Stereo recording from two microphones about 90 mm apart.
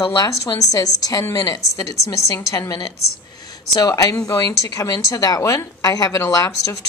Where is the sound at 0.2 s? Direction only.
45° left (ahead or behind).